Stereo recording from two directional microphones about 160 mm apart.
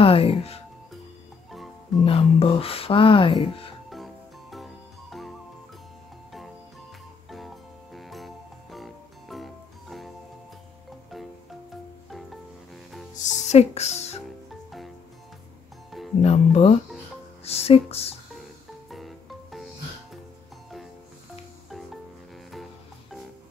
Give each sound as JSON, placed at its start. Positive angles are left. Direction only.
{"t": 0.0, "sound": "speech", "side_deg": 35}
{"t": 2.0, "sound": "music", "side_deg": 35}
{"t": 3.9, "sound": "music", "side_deg": 0}
{"t": 7.2, "sound": "music", "side_deg": 0}
{"t": 12.1, "sound": "music", "side_deg": 0}
{"t": 13.1, "sound": "music", "side_deg": 45}
{"t": 16.2, "sound": "music", "side_deg": 40}
{"t": 18.9, "sound": "music", "side_deg": 0}